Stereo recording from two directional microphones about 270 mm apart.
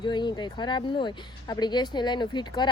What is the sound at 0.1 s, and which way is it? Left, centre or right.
Speech, centre.